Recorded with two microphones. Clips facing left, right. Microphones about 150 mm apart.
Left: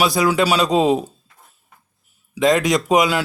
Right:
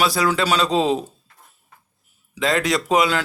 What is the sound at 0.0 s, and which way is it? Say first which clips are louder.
A man's voice: left 3 dB; 15° left (ahead or behind).